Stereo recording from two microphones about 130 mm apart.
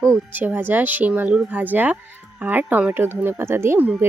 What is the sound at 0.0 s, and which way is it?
Speech, 15° right (ahead or behind).